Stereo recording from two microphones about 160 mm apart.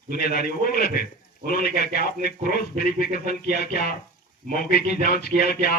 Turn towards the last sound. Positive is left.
turn(degrees=70)  # may be behind; listen again after turning